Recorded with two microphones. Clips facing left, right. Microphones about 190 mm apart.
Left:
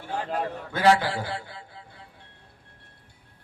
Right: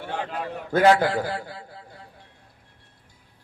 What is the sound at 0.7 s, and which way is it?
Speech, 40° right (ahead or behind).